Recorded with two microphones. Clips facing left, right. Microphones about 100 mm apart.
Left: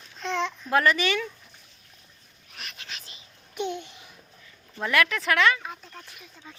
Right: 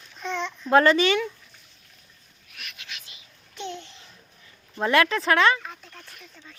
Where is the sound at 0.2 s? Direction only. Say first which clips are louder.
Left 2 dB; centre (ahead or behind).